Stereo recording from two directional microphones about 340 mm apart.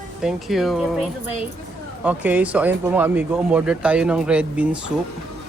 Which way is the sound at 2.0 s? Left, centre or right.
Centre.